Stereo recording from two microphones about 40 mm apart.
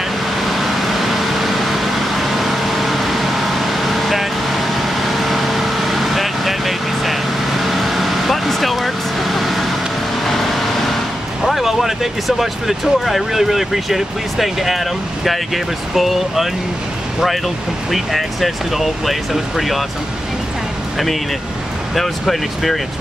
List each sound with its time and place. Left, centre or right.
0.5 s vehicle: centre
11.4 s speech: centre
17.9 s speech: centre
21.9 s speech: centre